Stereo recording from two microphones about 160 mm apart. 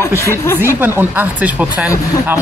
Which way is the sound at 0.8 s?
10° right (ahead or behind).